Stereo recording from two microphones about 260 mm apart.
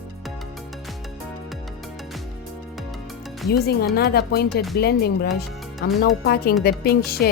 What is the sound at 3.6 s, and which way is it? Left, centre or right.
Speech, left.